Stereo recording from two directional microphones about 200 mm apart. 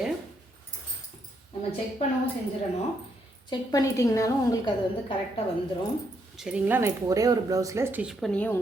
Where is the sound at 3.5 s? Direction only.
15° left (ahead or behind).